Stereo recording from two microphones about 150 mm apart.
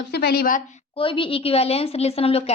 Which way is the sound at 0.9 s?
35° left (ahead or behind).